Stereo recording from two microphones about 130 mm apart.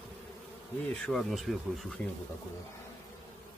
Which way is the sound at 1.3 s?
Centre (ahead or behind).